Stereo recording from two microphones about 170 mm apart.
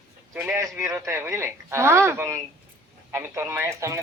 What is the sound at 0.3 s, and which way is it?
A woman's voice, 15° right (ahead or behind).